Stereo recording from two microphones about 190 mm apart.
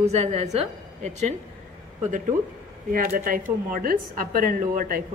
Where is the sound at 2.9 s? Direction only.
50° right (ahead or behind).